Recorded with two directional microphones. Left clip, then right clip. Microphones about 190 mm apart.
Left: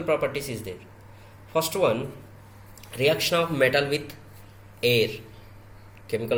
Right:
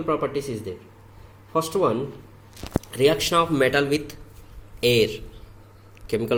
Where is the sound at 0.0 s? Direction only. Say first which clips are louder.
Right 1 dB; 40° right (ahead or behind).